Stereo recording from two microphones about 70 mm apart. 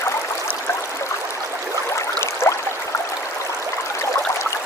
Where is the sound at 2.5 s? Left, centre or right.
Left.